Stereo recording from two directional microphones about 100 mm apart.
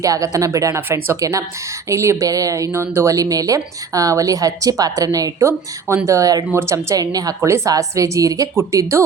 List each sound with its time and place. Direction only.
0.0 s a woman's voice: 35° right (ahead or behind)